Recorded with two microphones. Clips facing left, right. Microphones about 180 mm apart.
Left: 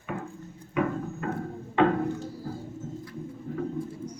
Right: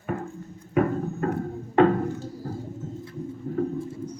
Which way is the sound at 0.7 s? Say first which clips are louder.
Right 5 dB; 45° right (ahead or behind).